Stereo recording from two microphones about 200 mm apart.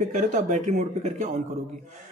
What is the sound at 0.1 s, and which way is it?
Speech, 35° right (ahead or behind).